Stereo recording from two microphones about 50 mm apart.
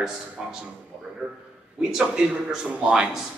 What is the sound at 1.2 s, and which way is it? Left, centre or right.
A man's voice, right.